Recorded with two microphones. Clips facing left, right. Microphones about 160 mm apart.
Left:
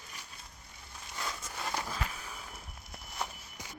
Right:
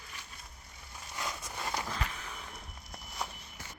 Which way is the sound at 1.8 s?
10° left (ahead or behind).